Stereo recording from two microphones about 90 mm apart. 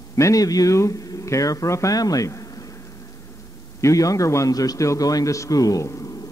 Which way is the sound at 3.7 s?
35° left (ahead or behind).